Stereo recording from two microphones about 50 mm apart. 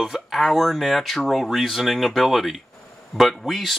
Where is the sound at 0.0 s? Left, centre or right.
Centre.